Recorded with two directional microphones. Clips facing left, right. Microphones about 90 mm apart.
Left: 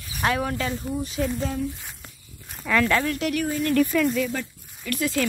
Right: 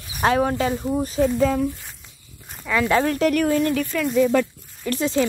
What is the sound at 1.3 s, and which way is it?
Speech, 60° right (ahead or behind).